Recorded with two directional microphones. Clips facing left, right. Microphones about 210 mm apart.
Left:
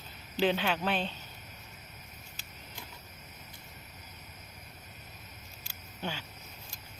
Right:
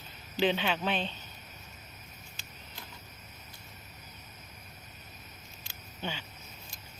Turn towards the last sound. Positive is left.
turn(degrees=5)  # may be behind; listen again after turning